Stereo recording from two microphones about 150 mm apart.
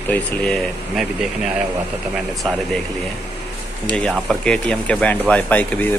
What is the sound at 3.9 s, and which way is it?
Speech, 5° left (ahead or behind).